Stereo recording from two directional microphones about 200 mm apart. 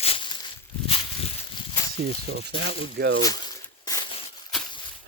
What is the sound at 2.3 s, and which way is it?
Speech, 55° right (ahead or behind).